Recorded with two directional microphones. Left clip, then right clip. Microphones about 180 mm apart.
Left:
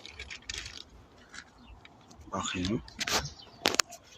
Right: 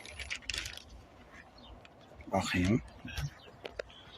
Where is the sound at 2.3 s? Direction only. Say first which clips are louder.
Right 2 dB; 55° right (ahead or behind).